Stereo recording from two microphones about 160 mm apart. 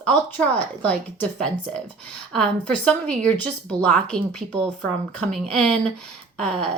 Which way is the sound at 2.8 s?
5° left (ahead or behind).